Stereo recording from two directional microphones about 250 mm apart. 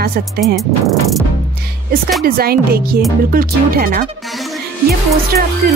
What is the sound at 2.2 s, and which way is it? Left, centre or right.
Speech, right.